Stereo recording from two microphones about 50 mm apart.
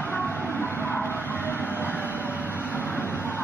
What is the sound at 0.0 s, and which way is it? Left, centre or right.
Music, left.